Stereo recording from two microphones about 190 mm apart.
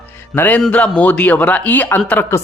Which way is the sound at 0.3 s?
10° left (ahead or behind).